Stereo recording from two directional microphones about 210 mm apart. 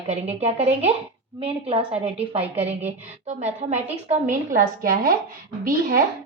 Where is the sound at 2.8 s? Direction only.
30° right (ahead or behind).